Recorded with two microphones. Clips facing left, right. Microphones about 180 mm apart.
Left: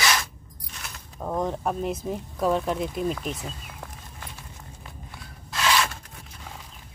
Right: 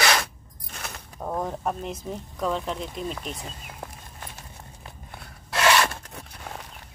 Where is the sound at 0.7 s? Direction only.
60° right (ahead or behind).